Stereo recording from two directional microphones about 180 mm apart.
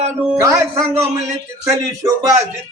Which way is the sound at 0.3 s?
20° right (ahead or behind).